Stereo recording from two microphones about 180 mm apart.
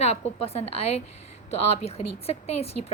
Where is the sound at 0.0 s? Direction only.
35° left (ahead or behind).